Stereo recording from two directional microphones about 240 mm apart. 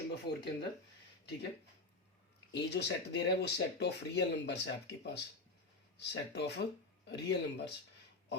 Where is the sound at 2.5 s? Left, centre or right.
Left.